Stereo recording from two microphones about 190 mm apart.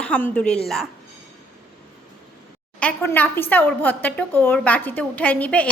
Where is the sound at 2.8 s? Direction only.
10° left (ahead or behind).